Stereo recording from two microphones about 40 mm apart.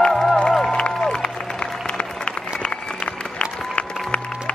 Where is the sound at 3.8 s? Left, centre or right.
Left.